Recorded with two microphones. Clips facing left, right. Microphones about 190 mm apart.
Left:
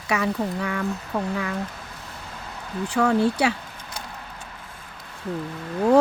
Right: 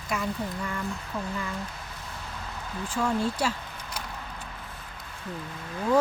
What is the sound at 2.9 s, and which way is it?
Speech, 70° left (ahead or behind).